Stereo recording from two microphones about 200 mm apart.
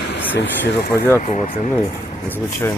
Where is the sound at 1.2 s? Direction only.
40° left (ahead or behind).